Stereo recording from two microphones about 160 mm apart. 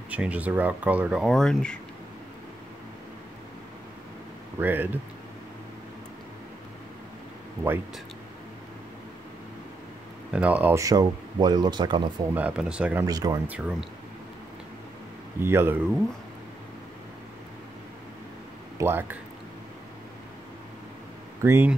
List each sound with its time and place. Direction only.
0.1 s speech: 10° right (ahead or behind)
4.6 s speech: 10° right (ahead or behind)
10.3 s speech: 10° right (ahead or behind); by 12.1 s 30° right (ahead or behind)
12.4 s speech: 5° right (ahead or behind)
13.0 s speech: 25° right (ahead or behind)
13.5 s speech: 5° right (ahead or behind)
15.4 s speech: 15° right (ahead or behind)
18.8 s speech: 15° right (ahead or behind)
21.4 s speech: 15° right (ahead or behind)